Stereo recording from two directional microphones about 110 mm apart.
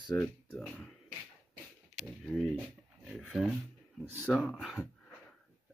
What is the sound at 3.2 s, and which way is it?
Speech, 10° right (ahead or behind).